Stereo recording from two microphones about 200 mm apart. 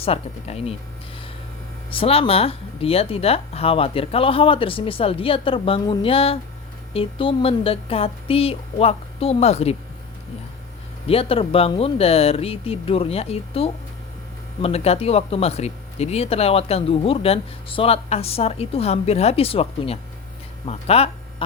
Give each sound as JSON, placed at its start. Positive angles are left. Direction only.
{"t": 0.0, "sound": "speech", "side_deg": 30}
{"t": 1.9, "sound": "speech", "side_deg": 30}
{"t": 11.0, "sound": "speech", "side_deg": 30}